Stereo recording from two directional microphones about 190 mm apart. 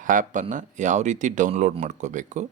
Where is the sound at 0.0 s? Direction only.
45° right (ahead or behind).